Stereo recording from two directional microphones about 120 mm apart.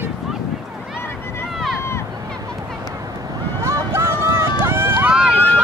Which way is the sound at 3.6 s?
25° right (ahead or behind).